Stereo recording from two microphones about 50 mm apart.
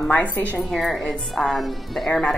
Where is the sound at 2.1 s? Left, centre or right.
Centre.